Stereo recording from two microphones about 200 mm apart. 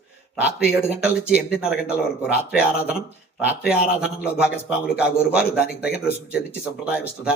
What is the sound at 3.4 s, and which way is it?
A man's voice, 5° right (ahead or behind).